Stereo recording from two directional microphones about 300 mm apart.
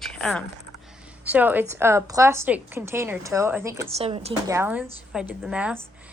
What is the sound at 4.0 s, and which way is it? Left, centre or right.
Speech, centre.